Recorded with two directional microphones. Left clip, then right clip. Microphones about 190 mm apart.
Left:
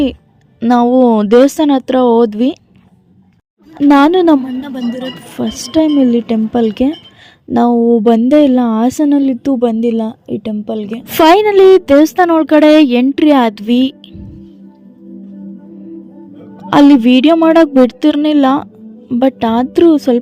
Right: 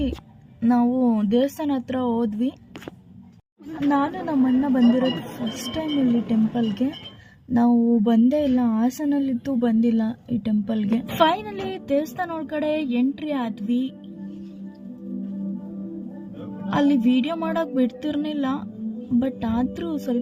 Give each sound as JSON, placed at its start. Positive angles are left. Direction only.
{"t": 0.6, "sound": "a woman's voice", "side_deg": 45}
{"t": 3.9, "sound": "a woman's voice", "side_deg": 45}
{"t": 5.7, "sound": "a woman's voice", "side_deg": 45}
{"t": 11.2, "sound": "a woman's voice", "side_deg": 50}
{"t": 16.6, "sound": "a woman's voice", "side_deg": 45}